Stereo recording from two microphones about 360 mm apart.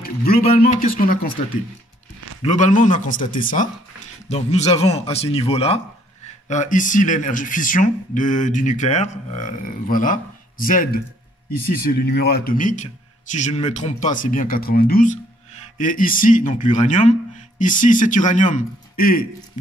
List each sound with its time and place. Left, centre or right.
0.0 s speech: left
2.4 s speech: left